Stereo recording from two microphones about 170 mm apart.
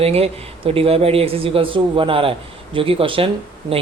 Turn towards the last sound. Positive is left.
turn(degrees=-35)  # may be behind; listen again after turning